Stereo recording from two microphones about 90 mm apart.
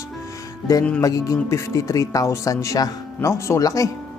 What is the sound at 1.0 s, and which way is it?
Speech, 40° left (ahead or behind).